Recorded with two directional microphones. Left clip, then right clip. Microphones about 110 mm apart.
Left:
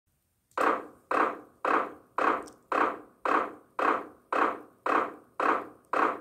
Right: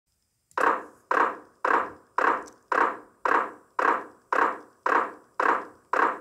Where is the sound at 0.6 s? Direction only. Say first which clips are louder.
Right 3 dB; 35° right (ahead or behind).